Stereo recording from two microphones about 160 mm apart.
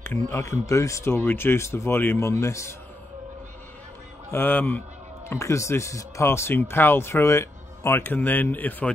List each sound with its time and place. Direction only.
0.0 s speech: 15° left (ahead or behind)
4.3 s speech: 10° left (ahead or behind)